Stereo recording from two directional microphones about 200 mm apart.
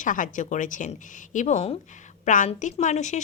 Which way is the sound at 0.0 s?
40° left (ahead or behind).